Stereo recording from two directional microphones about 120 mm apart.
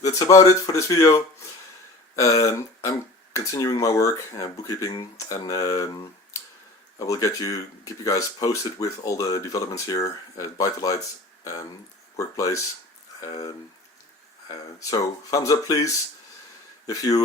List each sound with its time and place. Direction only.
0.0 s speech: 30° left (ahead or behind)
7.0 s speech: 30° left (ahead or behind)
12.1 s speech: 30° left (ahead or behind)